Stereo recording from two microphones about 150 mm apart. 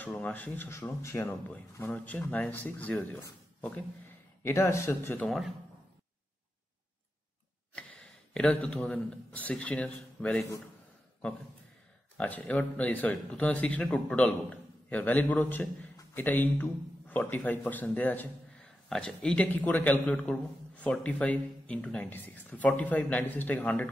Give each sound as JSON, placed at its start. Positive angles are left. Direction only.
{"t": 0.0, "sound": "a man's voice", "side_deg": 10}
{"t": 4.4, "sound": "a man's voice", "side_deg": 15}
{"t": 5.2, "sound": "speech", "side_deg": 0}
{"t": 7.7, "sound": "a man's voice", "side_deg": 5}
{"t": 12.2, "sound": "a man's voice", "side_deg": 10}